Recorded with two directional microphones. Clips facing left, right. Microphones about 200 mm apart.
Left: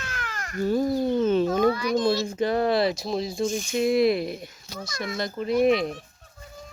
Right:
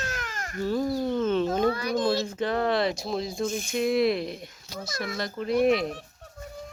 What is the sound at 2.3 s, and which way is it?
Speech, 10° left (ahead or behind).